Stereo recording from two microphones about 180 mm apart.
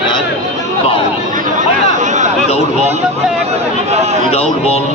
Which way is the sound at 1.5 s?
40° right (ahead or behind).